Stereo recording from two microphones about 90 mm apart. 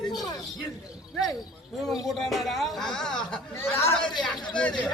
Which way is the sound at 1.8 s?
Centre (ahead or behind).